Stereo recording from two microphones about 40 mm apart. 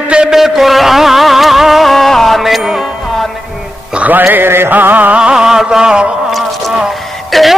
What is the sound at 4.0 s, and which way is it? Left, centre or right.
Music, right.